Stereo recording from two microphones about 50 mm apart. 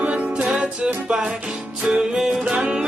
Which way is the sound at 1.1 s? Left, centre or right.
Centre.